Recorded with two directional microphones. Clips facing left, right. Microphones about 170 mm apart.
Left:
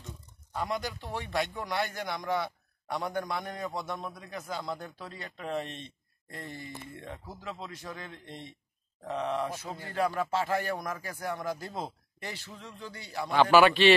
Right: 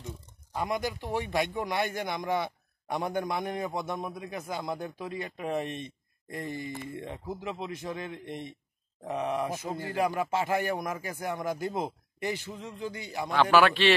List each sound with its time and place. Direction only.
0.6 s speech: 15° right (ahead or behind)
13.3 s a man's voice: 5° left (ahead or behind)